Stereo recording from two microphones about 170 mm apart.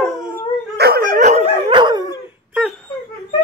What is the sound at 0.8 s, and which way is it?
Dog, 65° right (ahead or behind).